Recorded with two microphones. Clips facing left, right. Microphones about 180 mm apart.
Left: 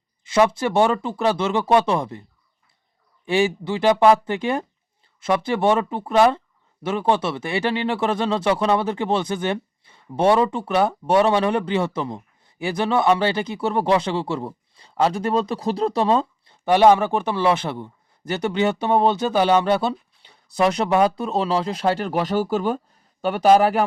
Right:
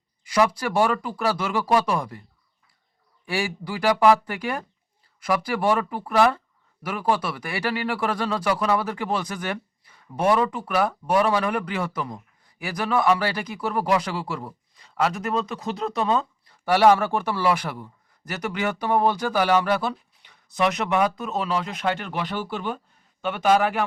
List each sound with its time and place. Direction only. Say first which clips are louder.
0.3 s speech: left 4 dB; 25° left (ahead or behind)
3.2 s a man's voice: left 8 dB; 20° left (ahead or behind)